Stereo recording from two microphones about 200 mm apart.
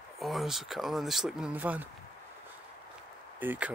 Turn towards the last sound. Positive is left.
turn(degrees=-10)  # may be behind; listen again after turning